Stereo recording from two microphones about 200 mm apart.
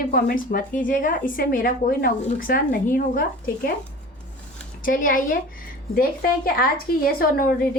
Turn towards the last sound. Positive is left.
turn(degrees=45)  # may be behind; listen again after turning